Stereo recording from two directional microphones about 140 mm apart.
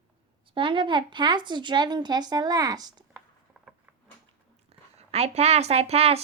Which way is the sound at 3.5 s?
5° right (ahead or behind).